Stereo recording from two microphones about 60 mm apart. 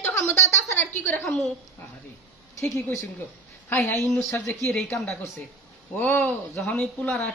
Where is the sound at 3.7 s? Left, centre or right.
Left.